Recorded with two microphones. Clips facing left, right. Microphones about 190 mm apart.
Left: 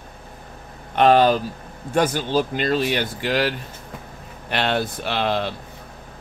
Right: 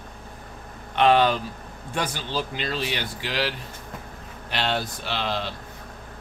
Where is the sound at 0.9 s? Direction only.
45° left (ahead or behind).